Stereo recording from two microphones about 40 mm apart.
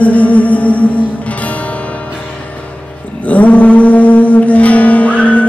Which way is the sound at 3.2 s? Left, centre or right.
Left.